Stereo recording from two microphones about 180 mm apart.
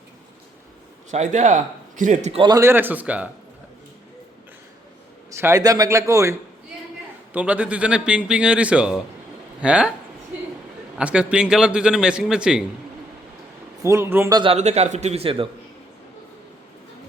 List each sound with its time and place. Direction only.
1.1 s a man's voice: 40° right (ahead or behind)
2.4 s a man's voice: 20° right (ahead or behind)
5.3 s a man's voice: 15° right (ahead or behind)
7.3 s a man's voice: 10° right (ahead or behind)
10.9 s a man's voice: 5° right (ahead or behind)
13.8 s a man's voice: 15° right (ahead or behind)
14.5 s a man's voice: 35° right (ahead or behind)